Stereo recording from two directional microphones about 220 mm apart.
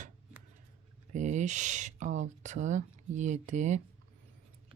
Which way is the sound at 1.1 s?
35° right (ahead or behind).